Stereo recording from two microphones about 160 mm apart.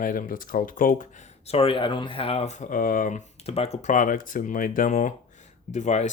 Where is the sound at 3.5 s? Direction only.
40° left (ahead or behind).